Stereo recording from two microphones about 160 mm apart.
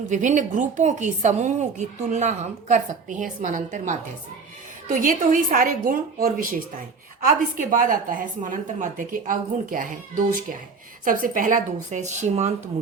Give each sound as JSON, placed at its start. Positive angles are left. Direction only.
{"t": 0.1, "sound": "a woman's voice", "side_deg": -50}
{"t": 4.9, "sound": "a woman's voice", "side_deg": -60}